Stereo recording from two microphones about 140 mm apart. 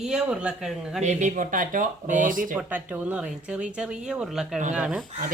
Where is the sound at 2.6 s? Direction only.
10° right (ahead or behind).